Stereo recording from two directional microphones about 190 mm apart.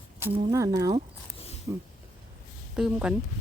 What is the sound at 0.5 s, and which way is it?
Speech, 15° right (ahead or behind).